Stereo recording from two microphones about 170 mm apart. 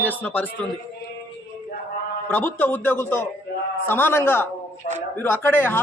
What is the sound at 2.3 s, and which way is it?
A man's voice, 10° left (ahead or behind).